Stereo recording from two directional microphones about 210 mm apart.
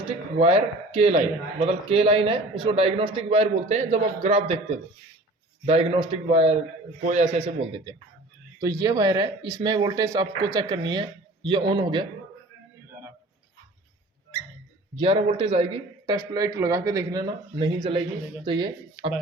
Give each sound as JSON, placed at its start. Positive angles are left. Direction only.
{"t": 0.3, "sound": "a man's voice", "side_deg": -30}
{"t": 14.9, "sound": "a man's voice", "side_deg": -25}